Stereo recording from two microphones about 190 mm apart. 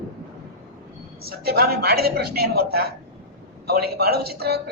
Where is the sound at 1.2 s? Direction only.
55° right (ahead or behind).